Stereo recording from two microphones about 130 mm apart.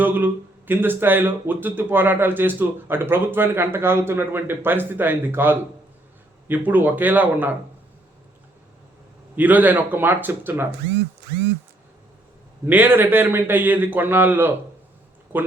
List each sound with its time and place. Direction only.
0.0 s speech: 15° right (ahead or behind)
9.3 s speech: 15° right (ahead or behind)
12.6 s speech: 15° right (ahead or behind)